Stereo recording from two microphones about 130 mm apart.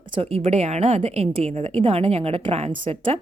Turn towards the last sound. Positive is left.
turn(degrees=-55)  # may be behind; listen again after turning